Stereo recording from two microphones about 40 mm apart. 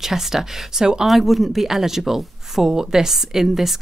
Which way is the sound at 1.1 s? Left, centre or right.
Centre.